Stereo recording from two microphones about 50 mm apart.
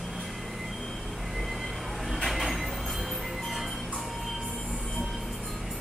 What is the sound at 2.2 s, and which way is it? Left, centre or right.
Train, centre.